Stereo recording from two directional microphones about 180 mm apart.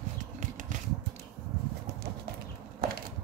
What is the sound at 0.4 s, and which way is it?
Finger snapping, 45° right (ahead or behind).